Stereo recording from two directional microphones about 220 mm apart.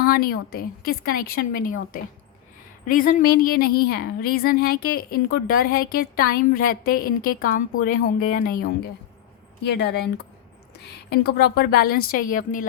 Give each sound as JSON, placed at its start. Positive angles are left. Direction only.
{"t": 0.0, "sound": "a woman's voice", "side_deg": 40}
{"t": 2.8, "sound": "a woman's voice", "side_deg": 40}
{"t": 11.1, "sound": "a woman's voice", "side_deg": 45}